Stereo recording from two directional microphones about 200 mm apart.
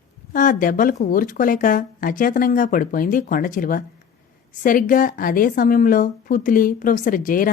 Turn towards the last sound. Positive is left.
turn(degrees=40)  # may be behind; listen again after turning